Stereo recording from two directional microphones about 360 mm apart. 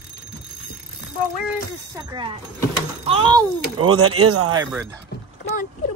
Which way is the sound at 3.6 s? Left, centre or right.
Right.